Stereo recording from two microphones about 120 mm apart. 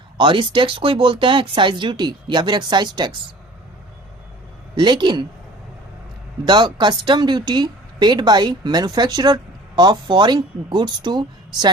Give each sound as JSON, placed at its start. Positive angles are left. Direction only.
{"t": 0.2, "sound": "speech", "side_deg": -40}
{"t": 4.7, "sound": "a woman's voice", "side_deg": -40}
{"t": 6.4, "sound": "a woman's voice", "side_deg": -40}